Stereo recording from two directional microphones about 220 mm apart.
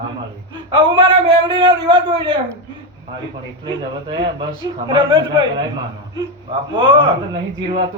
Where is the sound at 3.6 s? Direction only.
20° right (ahead or behind).